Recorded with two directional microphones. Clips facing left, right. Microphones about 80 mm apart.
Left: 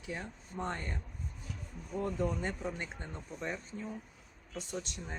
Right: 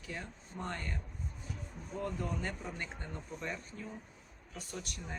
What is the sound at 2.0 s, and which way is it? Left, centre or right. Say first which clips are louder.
Speech: left 4 dB; left.